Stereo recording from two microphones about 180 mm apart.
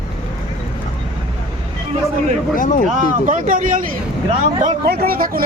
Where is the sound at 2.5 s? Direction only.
50° left (ahead or behind).